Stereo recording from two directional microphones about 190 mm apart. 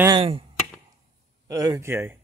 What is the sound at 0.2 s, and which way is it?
Chop, 30° right (ahead or behind).